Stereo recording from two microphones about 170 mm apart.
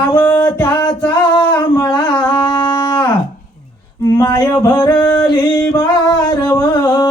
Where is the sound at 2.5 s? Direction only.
25° left (ahead or behind).